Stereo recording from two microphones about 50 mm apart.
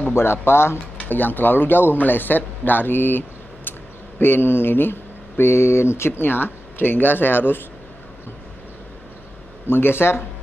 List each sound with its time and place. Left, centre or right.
0.1 s speech: left
0.9 s speech: left
5.4 s speech: left
9.7 s speech: left